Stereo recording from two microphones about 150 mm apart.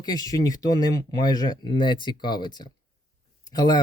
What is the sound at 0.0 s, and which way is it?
Speech, 25° left (ahead or behind).